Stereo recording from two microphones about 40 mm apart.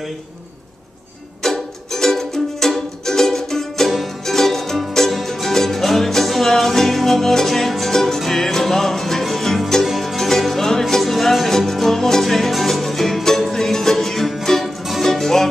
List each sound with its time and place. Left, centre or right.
1.4 s music: centre